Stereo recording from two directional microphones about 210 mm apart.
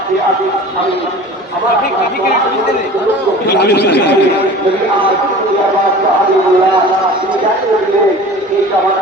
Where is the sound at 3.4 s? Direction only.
50° left (ahead or behind).